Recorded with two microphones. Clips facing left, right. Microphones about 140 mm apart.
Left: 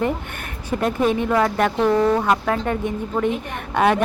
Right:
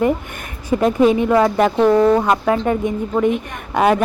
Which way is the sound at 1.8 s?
20° right (ahead or behind).